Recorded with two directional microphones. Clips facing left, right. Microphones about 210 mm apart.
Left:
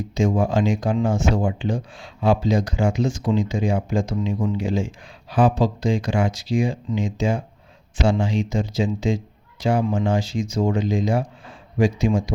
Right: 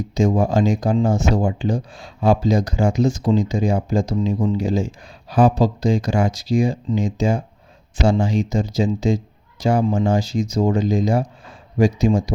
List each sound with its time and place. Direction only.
0.1 s speech: 40° right (ahead or behind)